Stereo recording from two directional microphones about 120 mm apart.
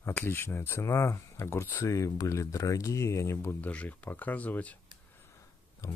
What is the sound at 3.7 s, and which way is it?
Speech, 10° left (ahead or behind).